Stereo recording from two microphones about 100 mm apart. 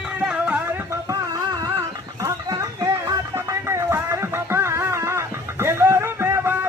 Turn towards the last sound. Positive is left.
turn(degrees=-25)  # may be behind; listen again after turning